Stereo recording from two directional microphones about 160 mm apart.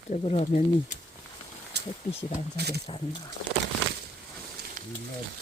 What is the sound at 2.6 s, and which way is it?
Speech, 90° right.